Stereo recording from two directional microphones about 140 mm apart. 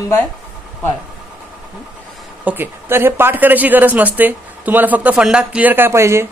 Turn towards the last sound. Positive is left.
turn(degrees=-20)  # may be behind; listen again after turning